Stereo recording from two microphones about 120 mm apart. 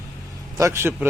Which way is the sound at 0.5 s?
25° right (ahead or behind).